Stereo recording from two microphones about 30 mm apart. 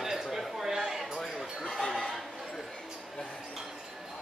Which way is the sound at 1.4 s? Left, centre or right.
Centre.